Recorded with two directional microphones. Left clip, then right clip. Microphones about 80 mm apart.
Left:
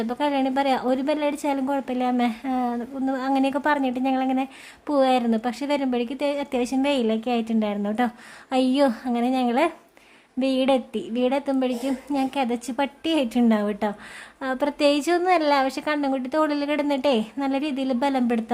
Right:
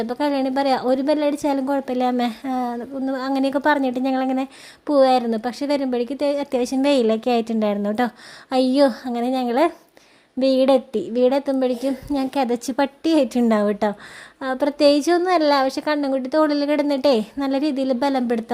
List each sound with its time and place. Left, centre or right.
0.0 s a woman's voice: right
2.0 s a woman's voice: right
4.9 s a woman's voice: right
6.8 s a woman's voice: right
14.4 s a woman's voice: right